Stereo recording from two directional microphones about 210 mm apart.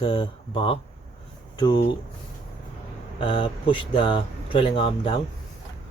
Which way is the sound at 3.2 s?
25° left (ahead or behind).